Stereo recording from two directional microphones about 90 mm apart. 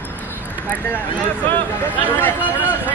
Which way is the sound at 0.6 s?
20° left (ahead or behind).